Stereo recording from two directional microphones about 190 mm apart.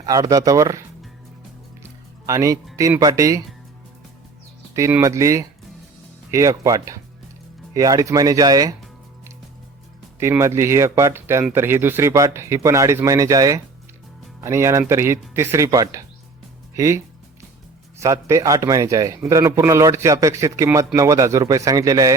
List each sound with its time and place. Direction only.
0.0 s speech: 20° right (ahead or behind)
2.2 s speech: 15° right (ahead or behind)
4.7 s speech: 15° right (ahead or behind)
10.2 s speech: 15° right (ahead or behind)
18.0 s speech: 15° right (ahead or behind)